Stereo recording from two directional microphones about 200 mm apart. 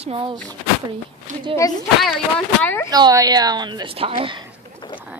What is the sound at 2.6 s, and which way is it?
Speech, 10° left (ahead or behind).